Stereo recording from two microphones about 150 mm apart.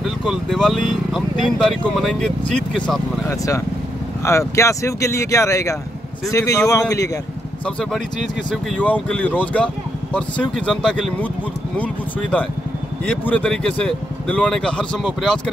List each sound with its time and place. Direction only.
0.0 s speech: centre (ahead or behind)
3.3 s speech: 20° left (ahead or behind)
8.5 s speech: 10° left (ahead or behind)